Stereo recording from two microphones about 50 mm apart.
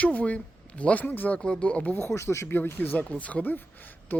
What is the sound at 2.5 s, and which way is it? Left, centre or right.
Speech, left.